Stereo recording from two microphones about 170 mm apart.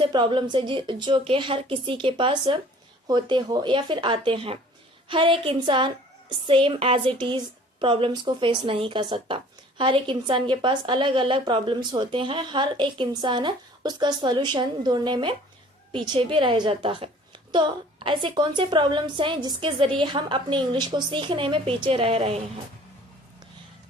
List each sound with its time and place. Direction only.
0.0 s a woman's voice: 30° right (ahead or behind)